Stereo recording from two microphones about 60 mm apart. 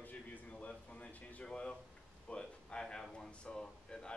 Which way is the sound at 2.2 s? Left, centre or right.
Centre.